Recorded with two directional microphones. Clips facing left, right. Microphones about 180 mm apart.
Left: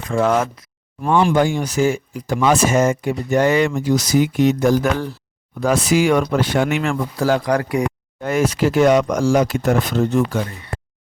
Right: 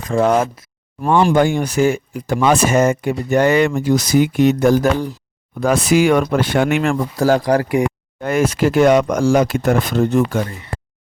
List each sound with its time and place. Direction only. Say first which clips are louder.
0.1 s speech: right 2 dB; 35° right (ahead or behind)
1.0 s speech: right 2 dB; 50° right (ahead or behind)
4.9 s speech: right 2 dB; 15° right (ahead or behind)
5.5 s speech: right 2 dB; 55° right (ahead or behind)
6.9 s speech: right 3 dB; 40° right (ahead or behind)
8.2 s speech: right 2 dB; 55° right (ahead or behind)